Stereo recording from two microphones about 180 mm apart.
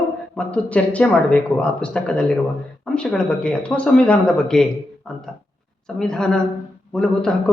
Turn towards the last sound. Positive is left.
turn(degrees=5)  # may be behind; listen again after turning